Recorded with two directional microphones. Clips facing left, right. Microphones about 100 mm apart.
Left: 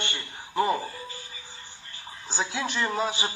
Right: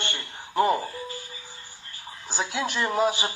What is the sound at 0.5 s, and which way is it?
Speech, 20° right (ahead or behind).